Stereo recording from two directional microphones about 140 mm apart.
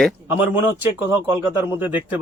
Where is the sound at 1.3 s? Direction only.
15° right (ahead or behind).